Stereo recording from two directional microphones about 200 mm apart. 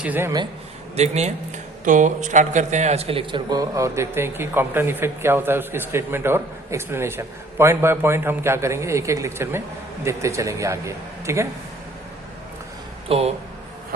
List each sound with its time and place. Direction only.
0.0 s a man's voice: 10° right (ahead or behind)
0.9 s a man's voice: 35° right (ahead or behind); by 11.4 s 15° right (ahead or behind)
13.1 s speech: 30° right (ahead or behind)